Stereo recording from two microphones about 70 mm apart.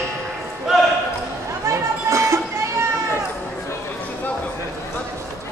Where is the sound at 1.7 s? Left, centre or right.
Right.